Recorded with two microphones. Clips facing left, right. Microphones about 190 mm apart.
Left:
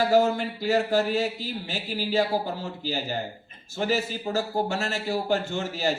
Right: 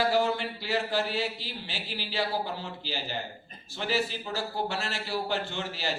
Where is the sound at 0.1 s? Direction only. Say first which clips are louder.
Left 5 dB; 45° left (ahead or behind).